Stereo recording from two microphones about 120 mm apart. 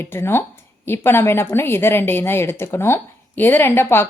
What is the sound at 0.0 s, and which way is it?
A woman's voice, 20° left (ahead or behind).